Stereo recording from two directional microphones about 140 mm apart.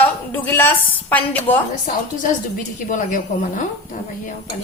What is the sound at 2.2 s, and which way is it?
A woman's voice, 65° left (ahead or behind).